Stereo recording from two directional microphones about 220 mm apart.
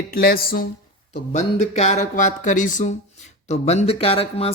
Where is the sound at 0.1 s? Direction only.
45° left (ahead or behind).